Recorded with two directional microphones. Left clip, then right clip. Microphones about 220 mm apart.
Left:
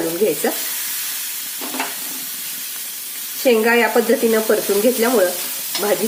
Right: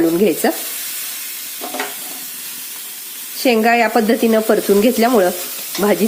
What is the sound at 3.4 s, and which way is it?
Speech, 45° right (ahead or behind).